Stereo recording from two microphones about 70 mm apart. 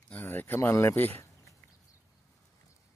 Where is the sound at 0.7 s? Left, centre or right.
Left.